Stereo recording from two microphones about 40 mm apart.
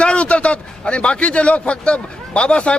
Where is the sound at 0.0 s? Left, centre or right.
Left.